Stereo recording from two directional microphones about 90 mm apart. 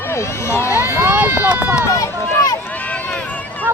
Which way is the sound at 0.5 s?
30° left (ahead or behind).